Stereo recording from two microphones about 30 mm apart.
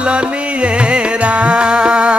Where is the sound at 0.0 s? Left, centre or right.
Right.